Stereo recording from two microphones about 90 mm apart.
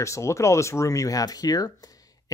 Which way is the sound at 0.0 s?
35° left (ahead or behind).